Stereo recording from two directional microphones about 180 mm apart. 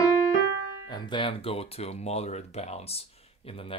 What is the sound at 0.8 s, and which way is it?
Speech, 25° left (ahead or behind).